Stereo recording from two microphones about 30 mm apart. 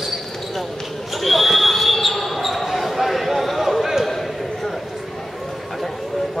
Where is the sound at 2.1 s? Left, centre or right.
Centre.